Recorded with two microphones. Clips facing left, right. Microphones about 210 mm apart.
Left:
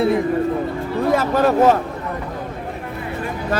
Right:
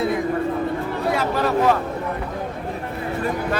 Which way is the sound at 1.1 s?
45° left (ahead or behind).